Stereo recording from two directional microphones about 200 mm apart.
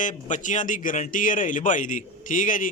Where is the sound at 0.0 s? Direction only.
40° left (ahead or behind).